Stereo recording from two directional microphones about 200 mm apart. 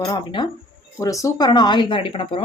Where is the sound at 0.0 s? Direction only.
20° left (ahead or behind).